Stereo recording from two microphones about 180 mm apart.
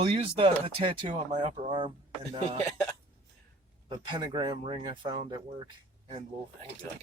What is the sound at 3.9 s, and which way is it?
Speech, 25° right (ahead or behind).